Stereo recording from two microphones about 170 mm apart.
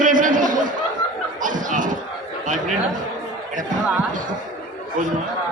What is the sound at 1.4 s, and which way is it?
Chuckle, 50° right (ahead or behind).